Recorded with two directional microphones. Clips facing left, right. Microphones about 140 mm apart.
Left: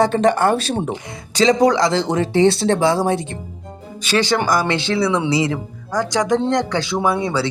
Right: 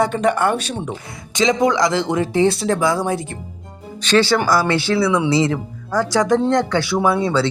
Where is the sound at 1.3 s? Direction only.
35° left (ahead or behind).